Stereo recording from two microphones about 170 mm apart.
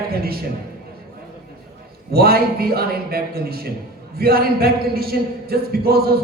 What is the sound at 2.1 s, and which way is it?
A man's voice, 65° right (ahead or behind).